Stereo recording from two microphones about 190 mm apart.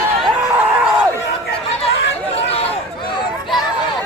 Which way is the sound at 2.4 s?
30° left (ahead or behind).